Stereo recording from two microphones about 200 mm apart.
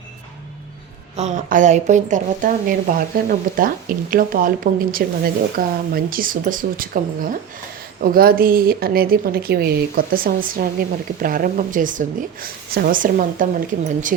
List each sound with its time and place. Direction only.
1.1 s a woman's voice: 35° right (ahead or behind)